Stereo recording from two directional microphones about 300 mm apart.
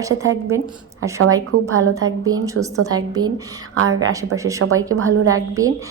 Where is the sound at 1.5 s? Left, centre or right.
Right.